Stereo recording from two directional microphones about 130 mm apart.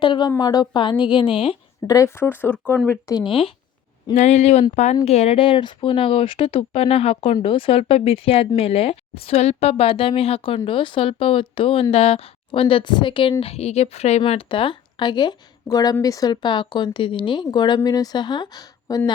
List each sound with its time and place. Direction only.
0.0 s speech: 40° left (ahead or behind)
1.9 s speech: 25° left (ahead or behind)
3.2 s speech: 45° left (ahead or behind)
4.1 s speech: 65° left (ahead or behind); by 13.3 s 40° left (ahead or behind)
13.4 s speech: 50° left (ahead or behind); by 19.1 s 30° left (ahead or behind)